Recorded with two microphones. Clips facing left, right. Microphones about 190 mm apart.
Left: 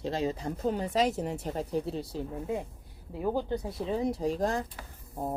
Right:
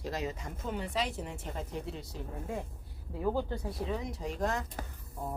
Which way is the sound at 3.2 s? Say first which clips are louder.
Left 2 dB; 15° left (ahead or behind).